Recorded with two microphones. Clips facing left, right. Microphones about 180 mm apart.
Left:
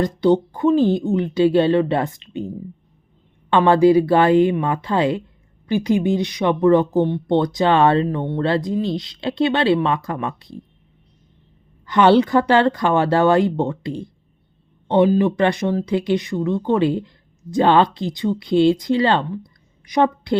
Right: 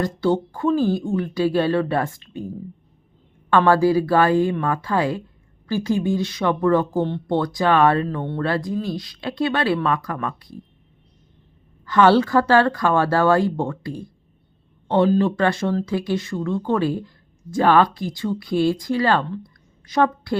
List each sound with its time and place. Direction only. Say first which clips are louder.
0.0 s speech: left 4 dB; 20° left (ahead or behind)
3.7 s speech: left 5 dB; 20° left (ahead or behind)
11.9 s a woman's voice: left 2 dB; 20° left (ahead or behind)